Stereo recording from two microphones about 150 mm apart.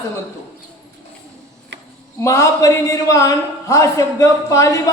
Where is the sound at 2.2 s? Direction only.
20° left (ahead or behind).